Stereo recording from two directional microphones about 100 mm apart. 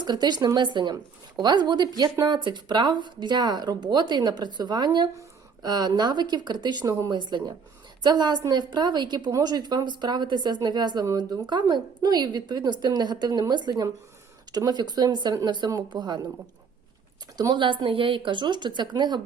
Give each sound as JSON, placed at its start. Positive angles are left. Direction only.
{"t": 0.0, "sound": "speech", "side_deg": -45}
{"t": 17.3, "sound": "speech", "side_deg": -45}